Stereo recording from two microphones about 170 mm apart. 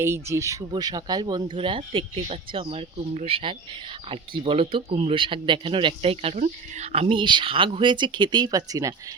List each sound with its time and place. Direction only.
0.0 s speech: 15° right (ahead or behind)